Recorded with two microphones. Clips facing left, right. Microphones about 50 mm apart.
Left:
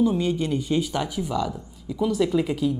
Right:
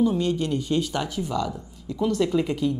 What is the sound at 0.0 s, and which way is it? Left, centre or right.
Speech, centre.